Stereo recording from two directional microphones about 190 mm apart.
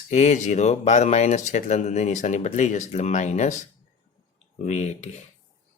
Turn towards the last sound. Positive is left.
turn(degrees=35)  # may be behind; listen again after turning